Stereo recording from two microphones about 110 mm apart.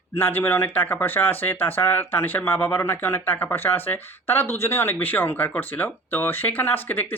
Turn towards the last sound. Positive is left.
turn(degrees=15)  # may be behind; listen again after turning